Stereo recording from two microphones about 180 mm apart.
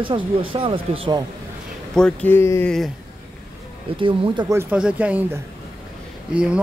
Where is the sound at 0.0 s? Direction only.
30° right (ahead or behind).